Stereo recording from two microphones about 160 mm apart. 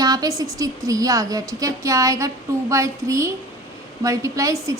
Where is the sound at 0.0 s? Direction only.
25° right (ahead or behind).